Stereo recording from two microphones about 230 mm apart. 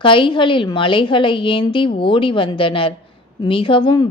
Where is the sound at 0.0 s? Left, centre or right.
Left.